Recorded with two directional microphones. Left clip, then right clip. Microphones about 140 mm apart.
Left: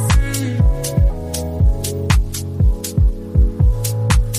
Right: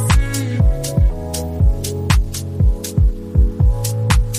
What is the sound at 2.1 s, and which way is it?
Music, centre (ahead or behind).